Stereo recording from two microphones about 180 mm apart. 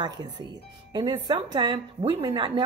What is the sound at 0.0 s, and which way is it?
Speech, 25° right (ahead or behind).